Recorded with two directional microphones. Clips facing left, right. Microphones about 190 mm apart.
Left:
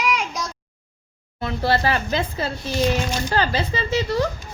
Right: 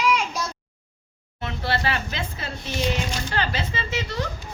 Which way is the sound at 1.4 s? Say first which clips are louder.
Left 5 dB; 40° left (ahead or behind).